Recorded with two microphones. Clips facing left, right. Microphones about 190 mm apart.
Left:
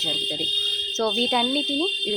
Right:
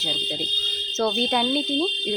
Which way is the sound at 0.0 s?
Centre (ahead or behind).